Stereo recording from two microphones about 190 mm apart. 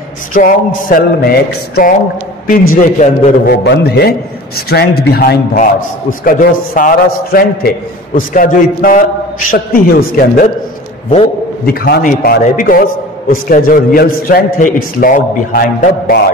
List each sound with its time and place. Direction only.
0.3 s a man's voice: 45° left (ahead or behind)
3.5 s speech: 60° left (ahead or behind)
5.6 s a man's voice: 45° left (ahead or behind)
11.6 s a man's voice: 55° left (ahead or behind)